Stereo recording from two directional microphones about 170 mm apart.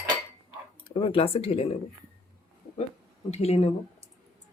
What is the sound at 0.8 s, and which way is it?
Speech, 30° left (ahead or behind).